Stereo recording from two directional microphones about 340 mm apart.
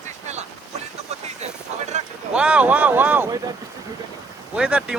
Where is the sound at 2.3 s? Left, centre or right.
Centre.